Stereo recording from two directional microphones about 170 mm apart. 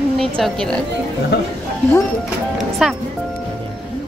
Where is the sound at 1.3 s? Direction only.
75° left (ahead or behind).